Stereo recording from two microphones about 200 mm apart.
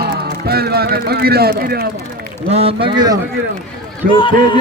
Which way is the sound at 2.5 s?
30° right (ahead or behind).